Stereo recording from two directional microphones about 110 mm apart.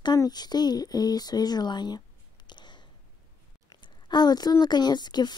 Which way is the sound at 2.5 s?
45° left (ahead or behind).